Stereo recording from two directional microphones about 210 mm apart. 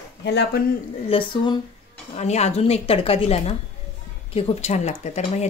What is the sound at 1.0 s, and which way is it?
Speech, 25° left (ahead or behind).